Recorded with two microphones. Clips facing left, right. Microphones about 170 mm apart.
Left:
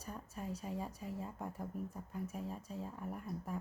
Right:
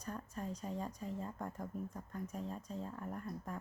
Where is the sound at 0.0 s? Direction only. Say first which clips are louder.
Right 2 dB; 10° left (ahead or behind).